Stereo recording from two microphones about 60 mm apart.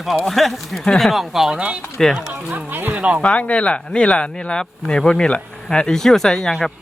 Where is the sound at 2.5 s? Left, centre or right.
Right.